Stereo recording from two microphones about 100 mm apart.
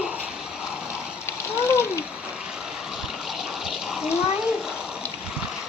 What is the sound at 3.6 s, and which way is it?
Bathtub, 5° right (ahead or behind).